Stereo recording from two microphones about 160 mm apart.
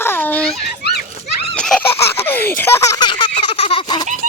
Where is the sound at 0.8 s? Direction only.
90° left.